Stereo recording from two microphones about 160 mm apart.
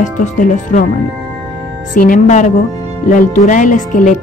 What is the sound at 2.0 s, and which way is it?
Speech, 55° left (ahead or behind).